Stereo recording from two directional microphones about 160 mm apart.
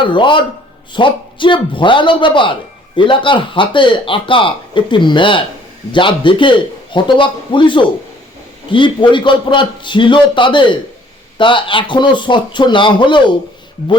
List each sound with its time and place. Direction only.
0.0 s a man's voice: 30° left (ahead or behind)